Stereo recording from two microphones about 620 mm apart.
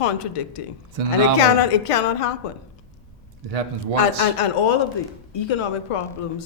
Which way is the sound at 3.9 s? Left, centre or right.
Left.